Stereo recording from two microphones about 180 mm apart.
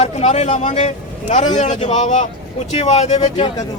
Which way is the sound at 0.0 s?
35° left (ahead or behind).